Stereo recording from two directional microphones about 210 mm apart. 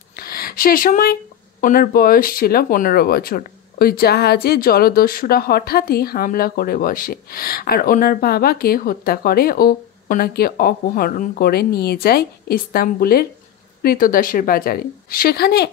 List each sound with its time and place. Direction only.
0.1 s speech: 45° left (ahead or behind)